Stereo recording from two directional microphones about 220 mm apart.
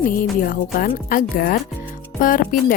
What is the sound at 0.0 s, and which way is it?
Speech, 40° left (ahead or behind).